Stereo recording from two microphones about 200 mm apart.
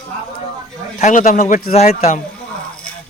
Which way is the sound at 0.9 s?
40° left (ahead or behind).